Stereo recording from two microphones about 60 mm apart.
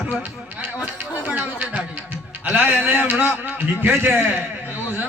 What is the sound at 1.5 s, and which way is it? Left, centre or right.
Music, right.